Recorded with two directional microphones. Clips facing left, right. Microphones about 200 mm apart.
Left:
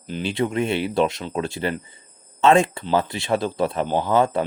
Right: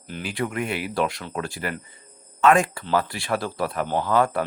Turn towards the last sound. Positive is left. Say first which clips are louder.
# left 2 dB
turn(degrees=25)  # may be behind; listen again after turning